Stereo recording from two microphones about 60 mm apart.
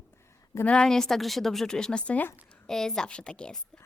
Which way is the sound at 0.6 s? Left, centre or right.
Centre.